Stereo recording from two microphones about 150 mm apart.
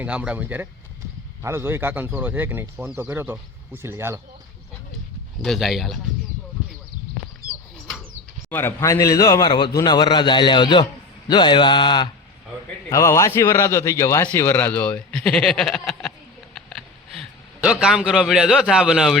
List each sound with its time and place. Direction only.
0.0 s speech: 10° right (ahead or behind)
5.4 s a man's voice: centre (ahead or behind)
8.4 s a man's voice: 15° left (ahead or behind); by 12.0 s 30° left (ahead or behind)
12.9 s a man's voice: 20° left (ahead or behind); by 16.1 s centre (ahead or behind)
16.6 s a sound: centre (ahead or behind)
17.6 s a man's voice: 5° right (ahead or behind)